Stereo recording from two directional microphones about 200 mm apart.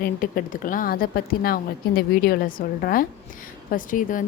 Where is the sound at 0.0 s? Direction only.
45° left (ahead or behind).